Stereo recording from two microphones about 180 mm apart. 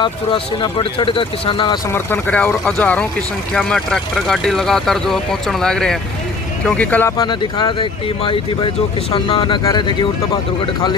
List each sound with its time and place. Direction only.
0.0 s speech: 25° left (ahead or behind)
2.0 s speech: 10° left (ahead or behind)
7.2 s speech: 25° left (ahead or behind)